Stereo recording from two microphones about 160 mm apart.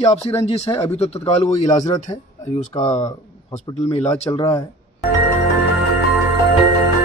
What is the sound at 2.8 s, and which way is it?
Speech, 45° left (ahead or behind).